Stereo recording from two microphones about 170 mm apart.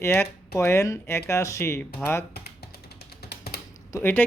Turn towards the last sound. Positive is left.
turn(degrees=10)  # may be behind; listen again after turning